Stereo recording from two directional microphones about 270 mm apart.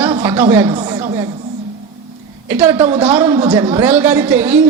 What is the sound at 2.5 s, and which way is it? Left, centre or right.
A woman's voice, centre.